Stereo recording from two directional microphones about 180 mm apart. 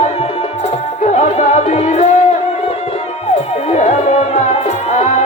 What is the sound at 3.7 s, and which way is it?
Music, 35° left (ahead or behind).